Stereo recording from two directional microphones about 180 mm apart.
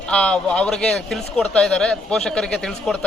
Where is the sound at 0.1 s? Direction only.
5° left (ahead or behind).